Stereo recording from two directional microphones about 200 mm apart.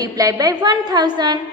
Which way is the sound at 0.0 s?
20° right (ahead or behind).